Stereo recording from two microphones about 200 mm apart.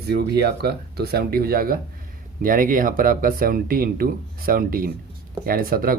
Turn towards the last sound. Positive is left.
turn(degrees=-45)  # may be behind; listen again after turning